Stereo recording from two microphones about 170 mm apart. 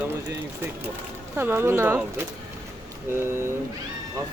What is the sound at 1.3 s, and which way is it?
A woman's voice, 15° right (ahead or behind).